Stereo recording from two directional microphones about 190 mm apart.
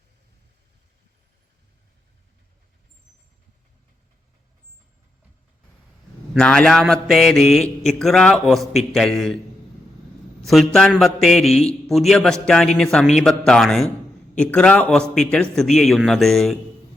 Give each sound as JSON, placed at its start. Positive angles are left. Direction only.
{"t": 6.3, "sound": "a man's voice", "side_deg": 5}
{"t": 10.4, "sound": "a man's voice", "side_deg": 0}